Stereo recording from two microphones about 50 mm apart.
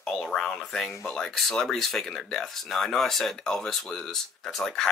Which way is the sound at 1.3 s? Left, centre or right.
Centre.